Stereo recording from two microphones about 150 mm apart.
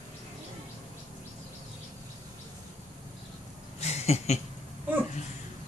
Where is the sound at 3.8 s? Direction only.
45° left (ahead or behind).